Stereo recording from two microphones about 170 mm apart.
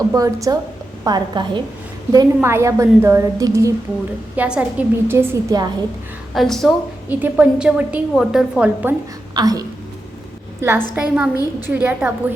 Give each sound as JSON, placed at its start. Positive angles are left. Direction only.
{"t": 0.1, "sound": "a woman's voice", "side_deg": -20}
{"t": 2.1, "sound": "a woman's voice", "side_deg": -15}
{"t": 4.4, "sound": "a woman's voice", "side_deg": -5}
{"t": 6.3, "sound": "a woman's voice", "side_deg": 0}
{"t": 7.1, "sound": "a woman's voice", "side_deg": -10}
{"t": 9.3, "sound": "a woman's voice", "side_deg": -20}